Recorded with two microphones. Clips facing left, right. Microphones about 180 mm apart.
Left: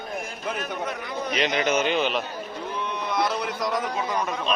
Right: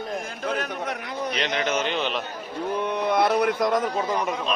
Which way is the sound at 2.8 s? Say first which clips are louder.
Right 4 dB; 55° right (ahead or behind).